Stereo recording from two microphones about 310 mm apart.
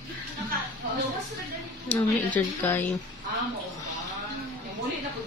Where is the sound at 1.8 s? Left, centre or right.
Centre.